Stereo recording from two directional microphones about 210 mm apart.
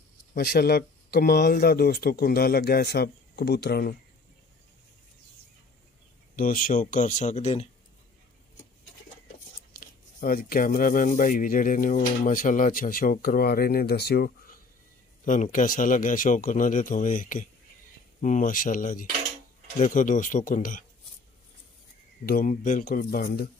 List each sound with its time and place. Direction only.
0.3 s speech: 45° left (ahead or behind)
6.3 s speech: 40° left (ahead or behind)
9.7 s a sound: 45° left (ahead or behind)
10.8 s speech: 40° left (ahead or behind)
22.2 s speech: 40° left (ahead or behind)